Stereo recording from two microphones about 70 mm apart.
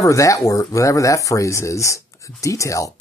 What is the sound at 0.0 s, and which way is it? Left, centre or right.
Speech, left.